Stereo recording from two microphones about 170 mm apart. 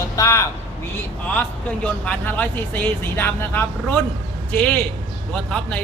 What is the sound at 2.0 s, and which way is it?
Speech, 10° left (ahead or behind).